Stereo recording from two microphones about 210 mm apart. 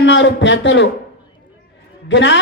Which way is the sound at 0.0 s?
60° left (ahead or behind).